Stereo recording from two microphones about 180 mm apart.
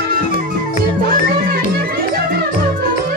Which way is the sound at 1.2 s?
55° right (ahead or behind).